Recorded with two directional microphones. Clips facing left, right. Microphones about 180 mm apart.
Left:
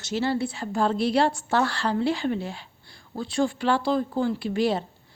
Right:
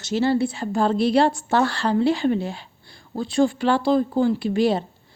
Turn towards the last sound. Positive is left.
turn(degrees=-20)  # may be behind; listen again after turning